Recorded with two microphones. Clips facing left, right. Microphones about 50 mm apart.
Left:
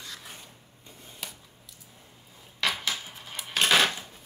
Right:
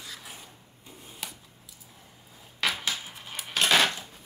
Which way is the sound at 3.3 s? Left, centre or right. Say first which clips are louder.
Even; centre.